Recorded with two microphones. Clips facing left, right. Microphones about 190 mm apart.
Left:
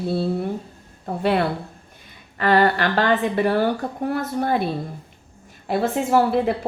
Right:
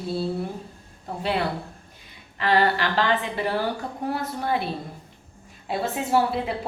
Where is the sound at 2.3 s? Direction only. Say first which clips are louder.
Left 4 dB; 50° left (ahead or behind).